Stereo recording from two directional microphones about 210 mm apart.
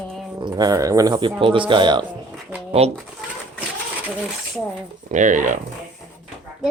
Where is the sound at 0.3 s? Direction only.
20° right (ahead or behind).